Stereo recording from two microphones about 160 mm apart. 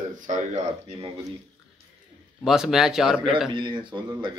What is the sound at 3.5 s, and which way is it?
Speech, 30° right (ahead or behind).